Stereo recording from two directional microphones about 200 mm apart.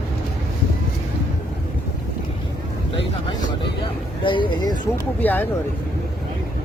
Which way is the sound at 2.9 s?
20° left (ahead or behind).